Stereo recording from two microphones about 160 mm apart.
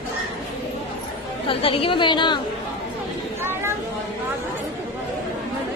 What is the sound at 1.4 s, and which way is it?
A woman's voice, 35° left (ahead or behind).